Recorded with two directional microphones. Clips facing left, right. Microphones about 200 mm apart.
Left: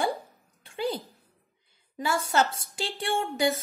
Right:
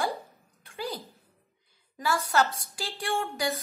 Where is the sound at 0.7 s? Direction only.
25° left (ahead or behind).